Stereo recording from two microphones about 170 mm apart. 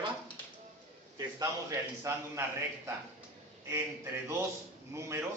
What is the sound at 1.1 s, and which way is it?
A man's voice, 20° right (ahead or behind).